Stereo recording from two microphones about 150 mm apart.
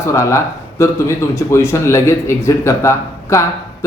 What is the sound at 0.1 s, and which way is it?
A man's voice, 20° left (ahead or behind).